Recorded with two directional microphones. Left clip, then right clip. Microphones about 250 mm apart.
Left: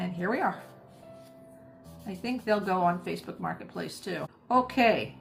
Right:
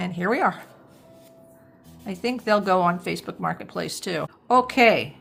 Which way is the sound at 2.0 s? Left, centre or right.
Right.